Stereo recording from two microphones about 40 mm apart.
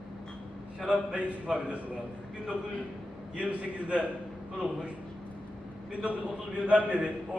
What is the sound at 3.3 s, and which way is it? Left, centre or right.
Speech, right.